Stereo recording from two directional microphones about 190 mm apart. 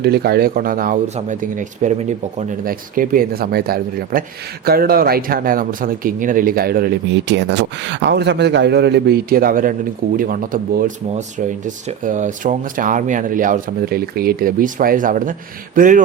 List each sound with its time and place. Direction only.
0.0 s speech: 55° right (ahead or behind)